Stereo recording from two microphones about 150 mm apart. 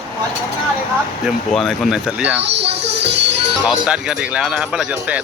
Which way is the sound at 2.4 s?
90° right.